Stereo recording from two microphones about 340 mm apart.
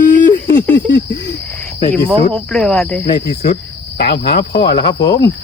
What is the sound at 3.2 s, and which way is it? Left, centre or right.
Cricket, left.